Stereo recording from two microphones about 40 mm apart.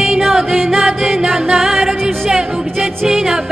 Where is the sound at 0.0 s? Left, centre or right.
Centre.